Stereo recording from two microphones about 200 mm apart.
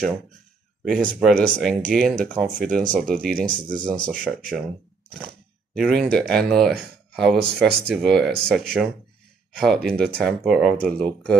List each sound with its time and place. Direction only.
0.8 s speech: centre (ahead or behind)
5.9 s speech: 5° left (ahead or behind)